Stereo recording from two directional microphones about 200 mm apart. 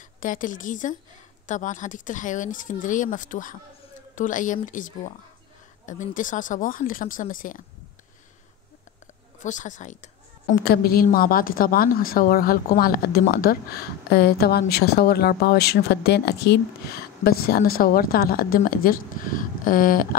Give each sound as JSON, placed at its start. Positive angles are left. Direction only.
{"t": 0.2, "sound": "speech", "side_deg": 40}
{"t": 9.4, "sound": "speech", "side_deg": 40}
{"t": 10.6, "sound": "a woman's voice", "side_deg": 50}